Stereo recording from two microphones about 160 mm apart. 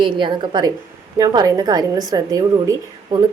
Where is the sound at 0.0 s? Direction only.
30° right (ahead or behind).